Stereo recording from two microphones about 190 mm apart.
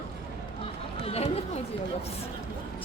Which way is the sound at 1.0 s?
30° left (ahead or behind).